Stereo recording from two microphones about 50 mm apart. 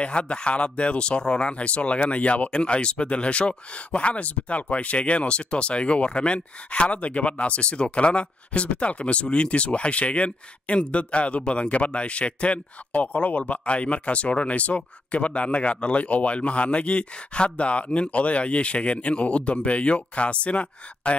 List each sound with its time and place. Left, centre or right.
0.0 s speech: left